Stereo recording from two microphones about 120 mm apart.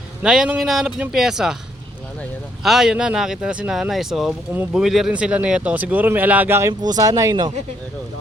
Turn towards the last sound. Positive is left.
turn(degrees=-30)  # may be behind; listen again after turning